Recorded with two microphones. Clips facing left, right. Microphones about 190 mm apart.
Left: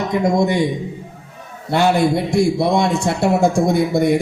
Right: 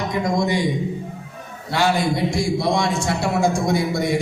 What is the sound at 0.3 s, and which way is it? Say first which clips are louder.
Speech: left 3 dB; 60° left (ahead or behind).